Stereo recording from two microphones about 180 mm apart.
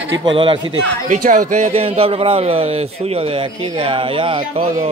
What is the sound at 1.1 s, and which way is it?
Speech, 45° right (ahead or behind).